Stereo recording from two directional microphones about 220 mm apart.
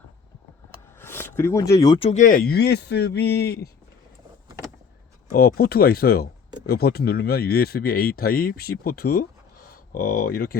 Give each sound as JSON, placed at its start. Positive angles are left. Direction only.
{"t": 0.9, "sound": "speech", "side_deg": 10}
{"t": 5.3, "sound": "speech", "side_deg": 40}